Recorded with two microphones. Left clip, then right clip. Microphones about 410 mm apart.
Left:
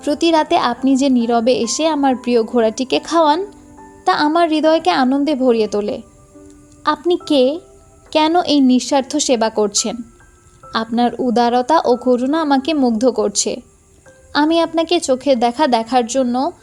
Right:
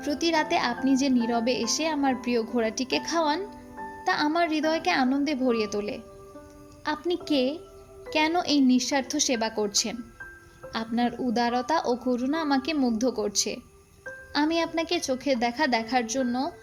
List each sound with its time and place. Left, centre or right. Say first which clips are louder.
0.0 s a woman's voice: left 11 dB; right